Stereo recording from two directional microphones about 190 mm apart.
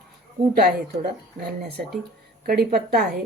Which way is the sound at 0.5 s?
55° right (ahead or behind).